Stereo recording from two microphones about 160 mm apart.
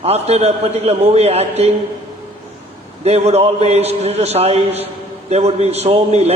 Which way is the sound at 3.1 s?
40° right (ahead or behind).